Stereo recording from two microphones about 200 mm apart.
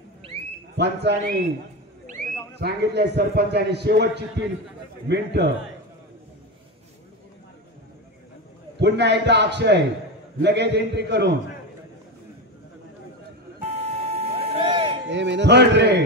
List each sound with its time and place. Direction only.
0.7 s a man's voice: 55° right (ahead or behind)
2.6 s a man's voice: 55° right (ahead or behind)
8.7 s a man's voice: 60° right (ahead or behind)
13.7 s vehicle: 30° right (ahead or behind)
15.0 s a man's voice: 60° right (ahead or behind)